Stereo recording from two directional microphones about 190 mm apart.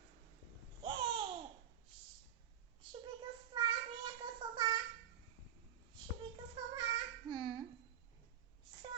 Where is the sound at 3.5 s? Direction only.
25° right (ahead or behind).